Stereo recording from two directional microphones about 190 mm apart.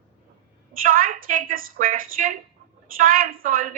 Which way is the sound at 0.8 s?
45° right (ahead or behind).